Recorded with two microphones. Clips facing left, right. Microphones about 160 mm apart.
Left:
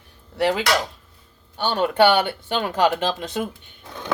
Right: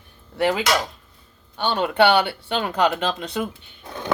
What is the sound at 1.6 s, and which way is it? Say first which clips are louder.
Speech: left 1 dB; 45° left (ahead or behind).